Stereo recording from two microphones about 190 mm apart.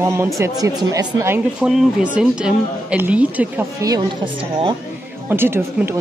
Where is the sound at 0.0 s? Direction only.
15° right (ahead or behind).